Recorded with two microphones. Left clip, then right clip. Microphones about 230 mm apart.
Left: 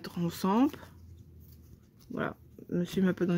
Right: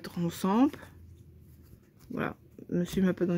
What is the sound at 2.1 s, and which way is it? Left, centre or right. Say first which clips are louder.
Speech: right 1 dB; centre.